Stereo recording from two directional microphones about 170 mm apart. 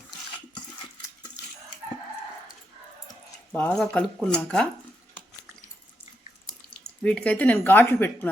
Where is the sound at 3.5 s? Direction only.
5° left (ahead or behind).